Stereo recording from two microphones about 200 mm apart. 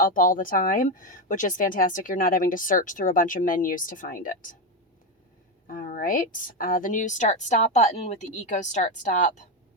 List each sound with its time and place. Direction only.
0.0 s a woman's voice: 40° left (ahead or behind)
5.6 s a woman's voice: 45° left (ahead or behind)